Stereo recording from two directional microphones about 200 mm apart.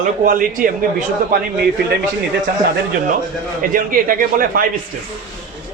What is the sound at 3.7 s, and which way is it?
Speech, 45° right (ahead or behind).